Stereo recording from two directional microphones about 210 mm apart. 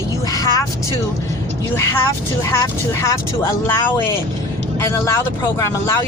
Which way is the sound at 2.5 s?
15° left (ahead or behind).